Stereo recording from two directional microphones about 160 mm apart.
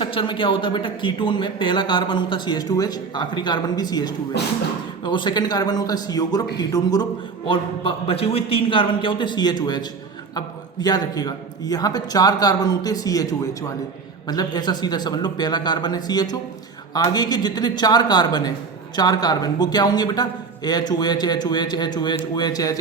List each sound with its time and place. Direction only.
0.0 s a man's voice: 30° left (ahead or behind)
4.4 s speech: 90° left
5.0 s a man's voice: 30° left (ahead or behind)